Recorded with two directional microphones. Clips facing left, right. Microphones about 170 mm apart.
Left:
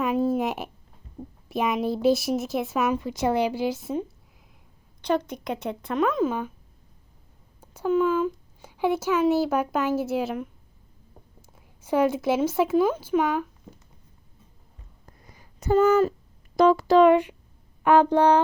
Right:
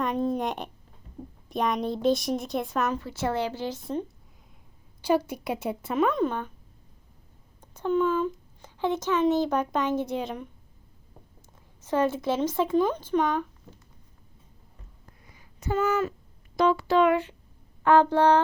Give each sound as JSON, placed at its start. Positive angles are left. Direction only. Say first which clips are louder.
{"t": 0.0, "sound": "speech", "louder": "left 3 dB", "side_deg": 5}
{"t": 5.0, "sound": "a woman's voice", "louder": "right 1 dB", "side_deg": -10}
{"t": 7.6, "sound": "a child's voice", "louder": "left 2 dB", "side_deg": 10}
{"t": 15.2, "sound": "a sound", "louder": "left 1 dB", "side_deg": 40}
{"t": 16.6, "sound": "speech", "louder": "left 5 dB", "side_deg": 40}
{"t": 17.8, "sound": "speech", "louder": "left 1 dB", "side_deg": 15}